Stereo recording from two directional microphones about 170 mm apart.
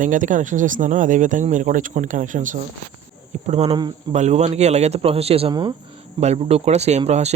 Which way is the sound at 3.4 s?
40° right (ahead or behind).